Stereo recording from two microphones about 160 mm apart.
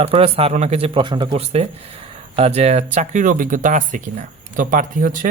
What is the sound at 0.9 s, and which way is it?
Speech, 30° right (ahead or behind).